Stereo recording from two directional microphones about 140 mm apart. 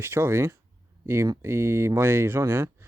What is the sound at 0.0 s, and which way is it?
Speech, 20° right (ahead or behind).